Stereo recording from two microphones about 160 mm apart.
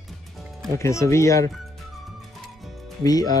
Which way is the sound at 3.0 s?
25° left (ahead or behind).